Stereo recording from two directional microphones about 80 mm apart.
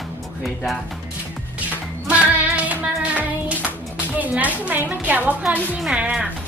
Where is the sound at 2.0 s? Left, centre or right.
Centre.